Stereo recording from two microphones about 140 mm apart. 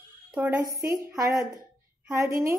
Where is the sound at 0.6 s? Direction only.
25° right (ahead or behind).